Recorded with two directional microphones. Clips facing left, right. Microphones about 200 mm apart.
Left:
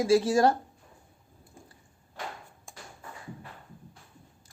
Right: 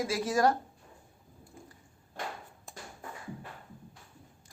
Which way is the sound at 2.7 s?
Centre (ahead or behind).